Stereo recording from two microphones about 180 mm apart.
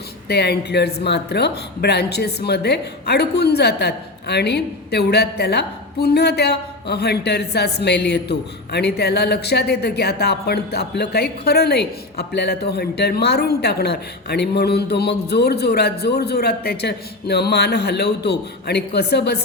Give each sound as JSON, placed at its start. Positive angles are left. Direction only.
{"t": 0.3, "sound": "speech", "side_deg": 65}